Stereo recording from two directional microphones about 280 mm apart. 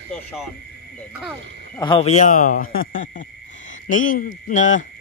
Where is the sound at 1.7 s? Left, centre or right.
Centre.